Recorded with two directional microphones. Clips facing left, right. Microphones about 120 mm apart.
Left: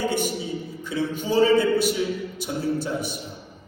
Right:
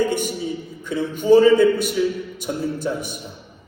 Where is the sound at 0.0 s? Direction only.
50° right (ahead or behind).